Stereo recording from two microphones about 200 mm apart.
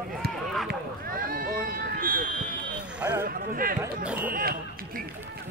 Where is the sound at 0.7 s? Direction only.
45° right (ahead or behind).